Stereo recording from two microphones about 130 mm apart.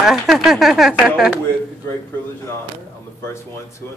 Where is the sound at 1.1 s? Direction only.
15° right (ahead or behind).